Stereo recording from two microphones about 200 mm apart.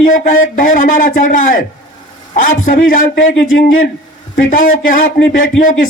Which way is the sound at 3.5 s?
75° left (ahead or behind).